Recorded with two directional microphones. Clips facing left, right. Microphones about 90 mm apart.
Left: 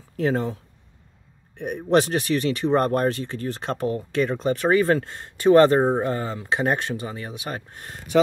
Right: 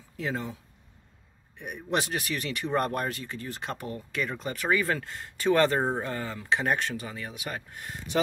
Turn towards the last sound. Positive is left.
turn(degrees=35)  # may be behind; listen again after turning